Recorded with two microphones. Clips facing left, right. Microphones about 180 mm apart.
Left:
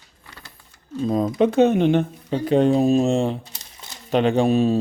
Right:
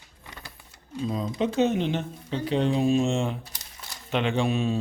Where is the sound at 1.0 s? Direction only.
50° left (ahead or behind).